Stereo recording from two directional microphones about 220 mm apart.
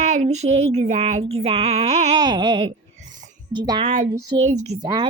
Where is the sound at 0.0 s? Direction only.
30° right (ahead or behind).